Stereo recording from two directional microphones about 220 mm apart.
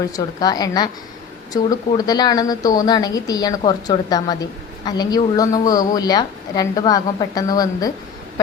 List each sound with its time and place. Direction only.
0.1 s a woman's voice: 15° left (ahead or behind)